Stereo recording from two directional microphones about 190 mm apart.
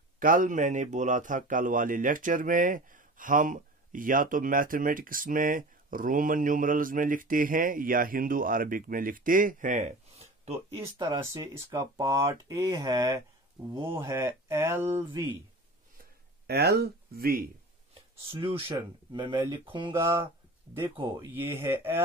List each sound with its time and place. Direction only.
0.2 s a man's voice: 45° right (ahead or behind)
10.9 s speech: 20° right (ahead or behind)
13.9 s speech: 15° right (ahead or behind)
16.4 s speech: 55° right (ahead or behind)
18.4 s speech: 25° right (ahead or behind)
20.9 s speech: 25° right (ahead or behind)
21.4 s speech: 10° right (ahead or behind)